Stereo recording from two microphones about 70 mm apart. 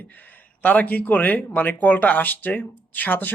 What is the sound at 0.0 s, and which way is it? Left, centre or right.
Speech, left.